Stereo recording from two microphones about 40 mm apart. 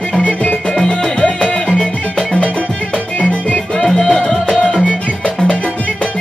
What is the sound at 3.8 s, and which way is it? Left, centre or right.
Music, centre.